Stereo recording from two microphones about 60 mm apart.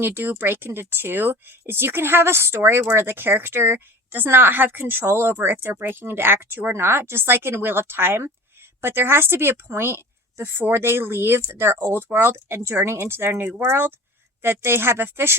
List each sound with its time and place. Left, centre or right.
0.0 s a woman's voice: right